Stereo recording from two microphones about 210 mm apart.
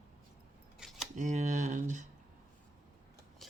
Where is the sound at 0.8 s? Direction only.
5° right (ahead or behind).